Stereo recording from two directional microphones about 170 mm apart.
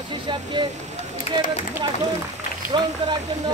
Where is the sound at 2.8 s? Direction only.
25° right (ahead or behind).